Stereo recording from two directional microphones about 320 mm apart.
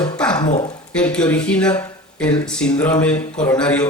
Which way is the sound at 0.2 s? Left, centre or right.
Centre.